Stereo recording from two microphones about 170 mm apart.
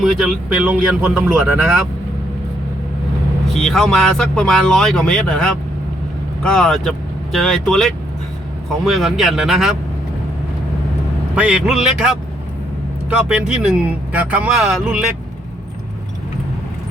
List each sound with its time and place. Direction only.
0.0 s speech: 5° right (ahead or behind)
3.5 s speech: centre (ahead or behind)
11.3 s speech: 5° right (ahead or behind)